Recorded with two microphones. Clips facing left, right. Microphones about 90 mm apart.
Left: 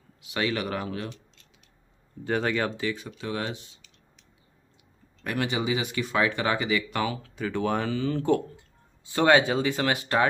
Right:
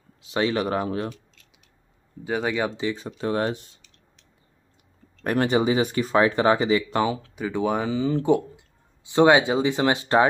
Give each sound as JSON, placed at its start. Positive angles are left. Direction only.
{"t": 0.2, "sound": "speech", "side_deg": -30}
{"t": 2.2, "sound": "speech", "side_deg": -10}
{"t": 2.8, "sound": "speech", "side_deg": -25}
{"t": 5.2, "sound": "speech", "side_deg": -40}
{"t": 7.3, "sound": "speech", "side_deg": -15}